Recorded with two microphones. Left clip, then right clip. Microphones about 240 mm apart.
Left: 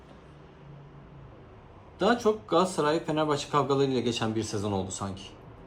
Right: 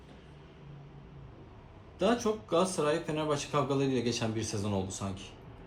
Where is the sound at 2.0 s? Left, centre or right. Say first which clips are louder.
Left 5 dB; centre.